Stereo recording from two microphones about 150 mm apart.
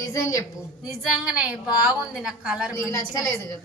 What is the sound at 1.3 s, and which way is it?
A woman's voice, 5° right (ahead or behind).